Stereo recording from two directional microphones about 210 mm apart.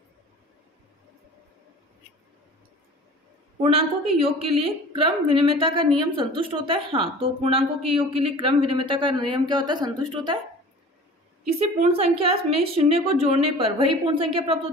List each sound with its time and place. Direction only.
3.6 s a woman's voice: 25° right (ahead or behind)
11.4 s a woman's voice: 30° right (ahead or behind)